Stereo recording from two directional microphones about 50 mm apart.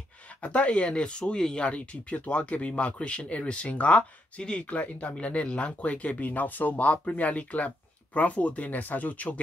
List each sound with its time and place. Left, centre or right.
0.4 s speech: left